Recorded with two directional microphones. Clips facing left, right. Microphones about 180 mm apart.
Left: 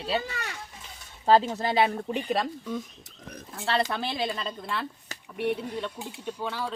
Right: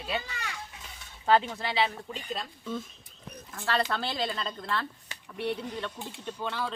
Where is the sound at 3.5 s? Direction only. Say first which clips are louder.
Left 2 dB; 25° left (ahead or behind).